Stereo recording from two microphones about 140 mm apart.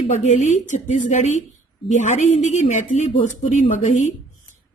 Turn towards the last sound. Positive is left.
turn(degrees=60)  # may be behind; listen again after turning